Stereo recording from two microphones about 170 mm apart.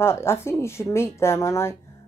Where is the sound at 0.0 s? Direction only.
15° left (ahead or behind).